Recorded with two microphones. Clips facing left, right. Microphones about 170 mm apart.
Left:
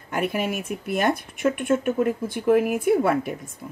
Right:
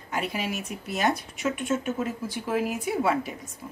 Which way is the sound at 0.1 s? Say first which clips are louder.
Left 5 dB; 50° left (ahead or behind).